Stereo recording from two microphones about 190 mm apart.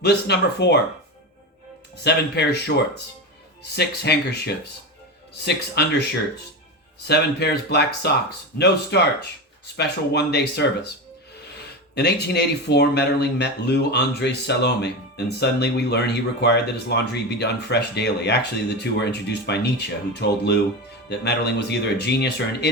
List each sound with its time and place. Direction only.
0.0 s speech: 60° left (ahead or behind)
2.0 s speech: 60° left (ahead or behind)
7.1 s speech: 60° left (ahead or behind)